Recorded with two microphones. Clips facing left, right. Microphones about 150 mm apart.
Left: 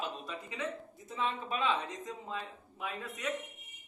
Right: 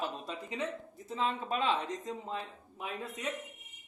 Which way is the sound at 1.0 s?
35° right (ahead or behind).